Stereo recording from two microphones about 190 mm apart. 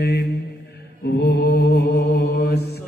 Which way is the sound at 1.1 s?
60° left (ahead or behind).